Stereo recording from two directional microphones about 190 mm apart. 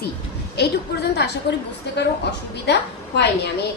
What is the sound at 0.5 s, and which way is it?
A woman's voice, 60° left (ahead or behind).